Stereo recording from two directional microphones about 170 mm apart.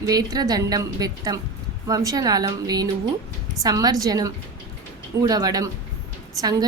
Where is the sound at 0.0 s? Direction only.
20° right (ahead or behind).